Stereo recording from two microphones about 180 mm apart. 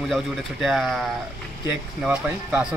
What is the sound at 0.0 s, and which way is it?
A man's voice, centre (ahead or behind).